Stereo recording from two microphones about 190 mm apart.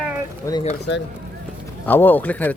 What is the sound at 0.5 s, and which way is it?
Speech, 15° left (ahead or behind).